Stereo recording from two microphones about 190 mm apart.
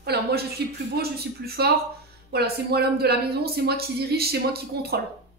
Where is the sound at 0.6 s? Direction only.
60° right (ahead or behind).